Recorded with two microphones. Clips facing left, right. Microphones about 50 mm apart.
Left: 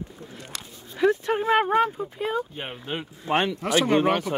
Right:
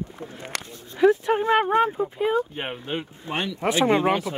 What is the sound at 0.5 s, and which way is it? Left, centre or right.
Speech, right.